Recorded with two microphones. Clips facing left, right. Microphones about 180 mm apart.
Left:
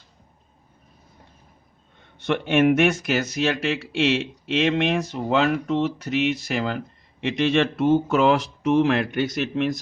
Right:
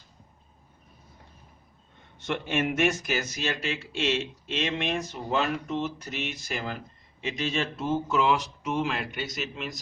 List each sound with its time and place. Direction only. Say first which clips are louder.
2.1 s speech: left 8 dB; 65° left (ahead or behind)